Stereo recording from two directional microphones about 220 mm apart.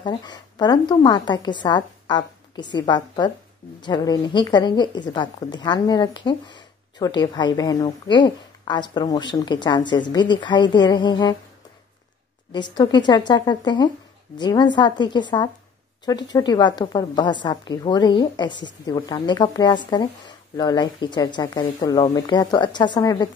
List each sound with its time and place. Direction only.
0.0 s a woman's voice: 20° left (ahead or behind)
12.5 s a woman's voice: 20° left (ahead or behind)